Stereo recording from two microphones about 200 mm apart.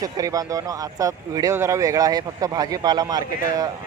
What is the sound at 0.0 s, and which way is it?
Speech, 15° right (ahead or behind).